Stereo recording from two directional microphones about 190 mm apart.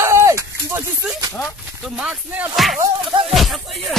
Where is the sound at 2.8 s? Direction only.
25° right (ahead or behind).